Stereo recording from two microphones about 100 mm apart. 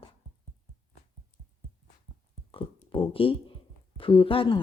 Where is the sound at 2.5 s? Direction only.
60° left (ahead or behind).